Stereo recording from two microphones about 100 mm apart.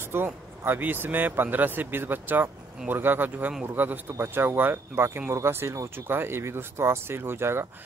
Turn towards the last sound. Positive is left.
turn(degrees=-25)  # may be behind; listen again after turning